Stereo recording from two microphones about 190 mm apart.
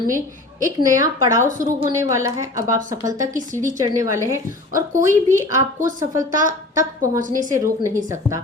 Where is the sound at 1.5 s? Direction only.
45° right (ahead or behind).